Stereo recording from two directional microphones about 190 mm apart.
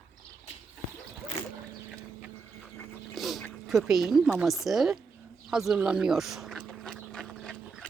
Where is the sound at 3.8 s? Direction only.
Centre (ahead or behind).